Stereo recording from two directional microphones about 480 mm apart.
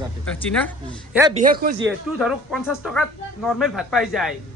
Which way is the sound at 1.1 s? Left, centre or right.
Centre.